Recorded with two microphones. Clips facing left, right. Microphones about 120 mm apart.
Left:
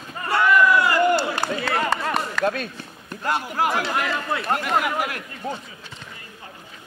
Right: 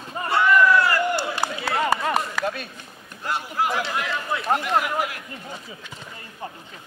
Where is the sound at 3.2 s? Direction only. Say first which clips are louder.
Left 2 dB; 60° left (ahead or behind).